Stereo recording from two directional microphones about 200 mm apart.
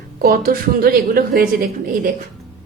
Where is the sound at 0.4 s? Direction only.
45° right (ahead or behind).